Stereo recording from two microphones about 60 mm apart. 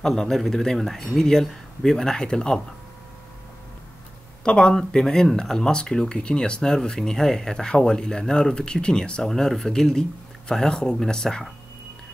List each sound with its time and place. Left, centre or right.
0.0 s speech: centre
4.5 s speech: centre